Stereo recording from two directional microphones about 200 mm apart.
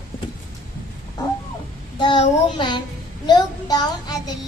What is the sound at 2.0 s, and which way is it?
Child singing, 25° left (ahead or behind).